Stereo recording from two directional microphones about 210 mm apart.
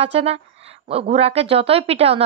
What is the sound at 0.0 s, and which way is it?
Speech, 30° right (ahead or behind).